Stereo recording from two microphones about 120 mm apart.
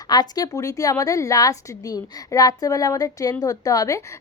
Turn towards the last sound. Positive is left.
turn(degrees=30)  # may be behind; listen again after turning